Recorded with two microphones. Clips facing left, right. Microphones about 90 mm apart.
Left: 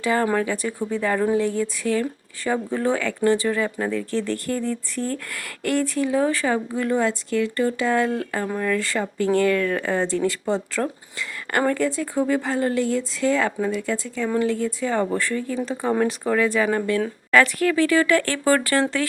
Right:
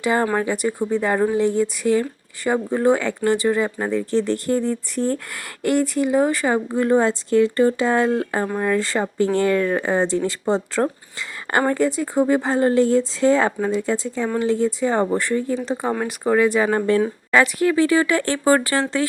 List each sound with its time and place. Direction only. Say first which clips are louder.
0.0 s speech: right 1 dB; 20° right (ahead or behind)
6.7 s speech: right 4 dB; 30° right (ahead or behind)
16.6 s speech: right 3 dB; 30° right (ahead or behind)
17.0 s speech: right 1 dB; 20° right (ahead or behind)